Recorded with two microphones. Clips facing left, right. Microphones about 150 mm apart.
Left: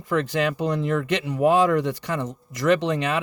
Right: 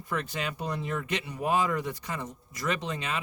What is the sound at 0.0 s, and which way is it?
Speech, 90° left.